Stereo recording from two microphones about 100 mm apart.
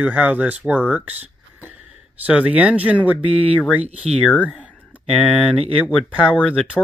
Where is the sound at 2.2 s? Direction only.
10° right (ahead or behind).